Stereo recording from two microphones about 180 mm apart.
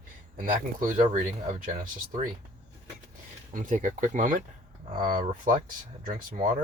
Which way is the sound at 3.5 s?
45° right (ahead or behind).